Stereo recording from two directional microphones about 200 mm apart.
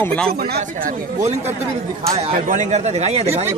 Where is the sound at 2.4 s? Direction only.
35° right (ahead or behind).